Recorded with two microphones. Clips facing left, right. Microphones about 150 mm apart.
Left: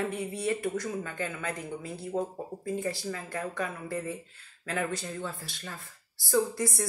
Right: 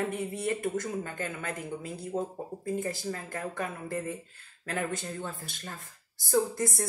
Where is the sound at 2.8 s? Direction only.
45° right (ahead or behind).